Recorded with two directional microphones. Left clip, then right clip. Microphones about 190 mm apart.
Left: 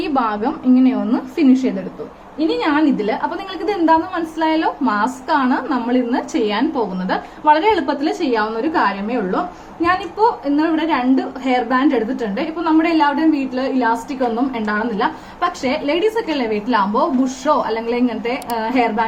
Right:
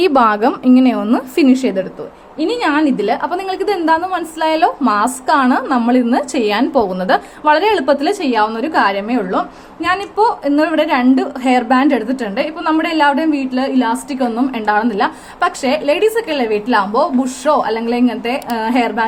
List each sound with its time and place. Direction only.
0.0 s a woman's voice: 55° right (ahead or behind)